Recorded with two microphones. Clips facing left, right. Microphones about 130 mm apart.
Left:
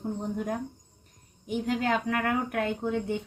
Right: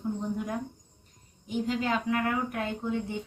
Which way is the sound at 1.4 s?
55° left (ahead or behind).